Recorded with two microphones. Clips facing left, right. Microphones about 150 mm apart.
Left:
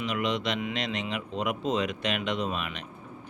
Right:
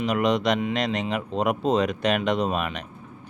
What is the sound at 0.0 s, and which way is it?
Speech, 40° right (ahead or behind).